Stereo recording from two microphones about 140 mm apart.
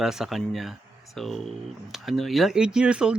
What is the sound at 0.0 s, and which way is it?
Speech, 5° right (ahead or behind).